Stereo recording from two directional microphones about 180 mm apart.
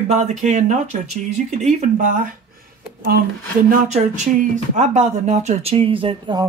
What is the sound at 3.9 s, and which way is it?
Speech, 40° right (ahead or behind).